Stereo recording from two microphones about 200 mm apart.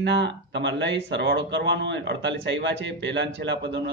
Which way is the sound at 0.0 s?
60° right (ahead or behind).